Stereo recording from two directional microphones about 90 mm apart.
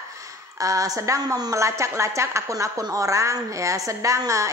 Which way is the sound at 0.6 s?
40° right (ahead or behind).